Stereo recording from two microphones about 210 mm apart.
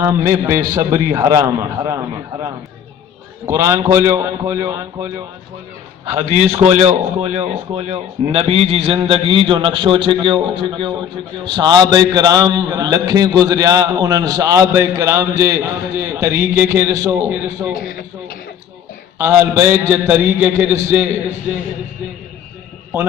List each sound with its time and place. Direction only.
0.0 s a man's voice: 10° right (ahead or behind)
6.1 s a man's voice: 30° right (ahead or behind); by 17.7 s 15° right (ahead or behind)
17.7 s a man's voice: 45° left (ahead or behind)
19.2 s a man's voice: 10° right (ahead or behind)